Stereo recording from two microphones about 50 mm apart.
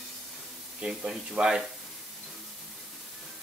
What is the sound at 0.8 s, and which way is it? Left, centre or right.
Speech, centre.